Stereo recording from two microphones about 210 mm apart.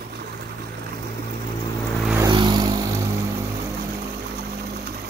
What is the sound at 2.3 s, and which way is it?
Vehicle, 20° right (ahead or behind).